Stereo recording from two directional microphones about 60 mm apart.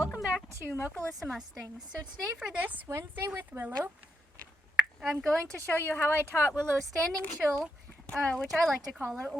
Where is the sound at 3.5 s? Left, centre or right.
Right.